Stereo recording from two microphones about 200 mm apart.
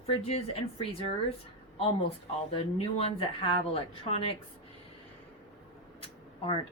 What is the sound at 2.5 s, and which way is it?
Speech, 30° left (ahead or behind).